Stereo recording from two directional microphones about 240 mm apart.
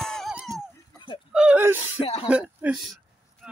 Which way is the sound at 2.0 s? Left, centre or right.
Left.